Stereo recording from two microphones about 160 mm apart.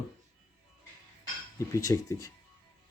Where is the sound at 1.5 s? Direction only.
20° left (ahead or behind).